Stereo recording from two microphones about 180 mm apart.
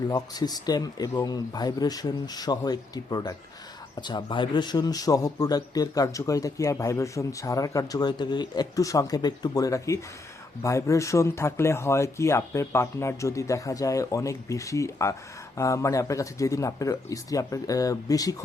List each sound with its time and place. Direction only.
0.1 s a man's voice: 20° left (ahead or behind)